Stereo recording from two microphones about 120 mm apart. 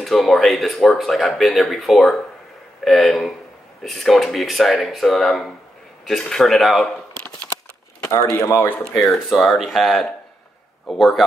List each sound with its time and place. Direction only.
0.0 s speech: centre (ahead or behind)
8.4 s speech: 25° left (ahead or behind)
8.6 s speech: 10° left (ahead or behind)
8.9 s speech: centre (ahead or behind)